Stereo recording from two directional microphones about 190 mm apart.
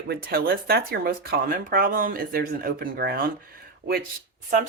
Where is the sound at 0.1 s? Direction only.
55° right (ahead or behind).